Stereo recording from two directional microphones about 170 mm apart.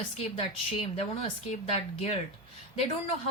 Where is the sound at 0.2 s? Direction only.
35° left (ahead or behind).